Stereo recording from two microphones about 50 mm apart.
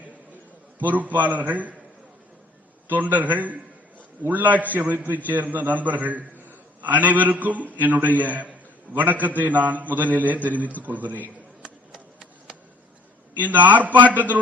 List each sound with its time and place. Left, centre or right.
0.8 s a man's voice: right
2.9 s a man's voice: right
11.6 s a sound: centre
13.4 s a man's voice: right